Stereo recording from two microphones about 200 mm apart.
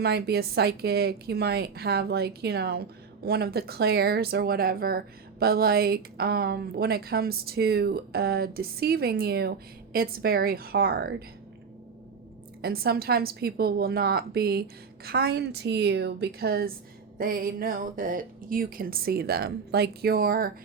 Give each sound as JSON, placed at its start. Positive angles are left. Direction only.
{"t": 0.0, "sound": "speech", "side_deg": -55}
{"t": 12.6, "sound": "speech", "side_deg": -50}